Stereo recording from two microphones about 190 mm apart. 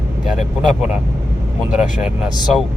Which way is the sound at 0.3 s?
5° right (ahead or behind).